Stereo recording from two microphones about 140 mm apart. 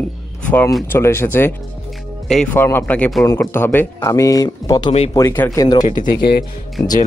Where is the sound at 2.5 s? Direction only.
15° left (ahead or behind).